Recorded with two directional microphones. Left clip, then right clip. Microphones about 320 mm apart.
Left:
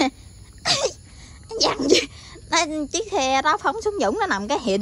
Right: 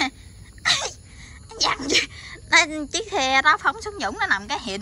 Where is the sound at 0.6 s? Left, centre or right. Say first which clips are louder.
Even; left.